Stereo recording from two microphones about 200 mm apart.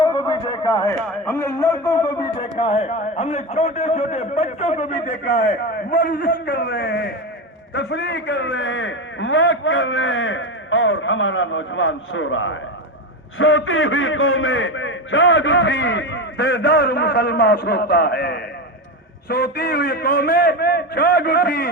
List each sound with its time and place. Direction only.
0.0 s a man's voice: 20° left (ahead or behind); by 12.5 s 75° left (ahead or behind)
13.4 s a man's voice: 90° left; by 21.7 s 60° left (ahead or behind)